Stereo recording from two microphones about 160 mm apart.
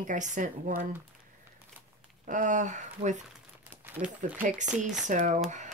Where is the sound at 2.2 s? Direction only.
50° right (ahead or behind).